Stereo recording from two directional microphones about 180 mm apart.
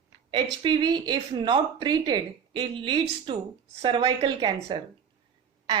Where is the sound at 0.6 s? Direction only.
25° right (ahead or behind).